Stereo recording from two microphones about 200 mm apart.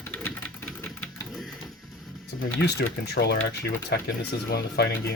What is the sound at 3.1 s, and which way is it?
Speech, 55° left (ahead or behind).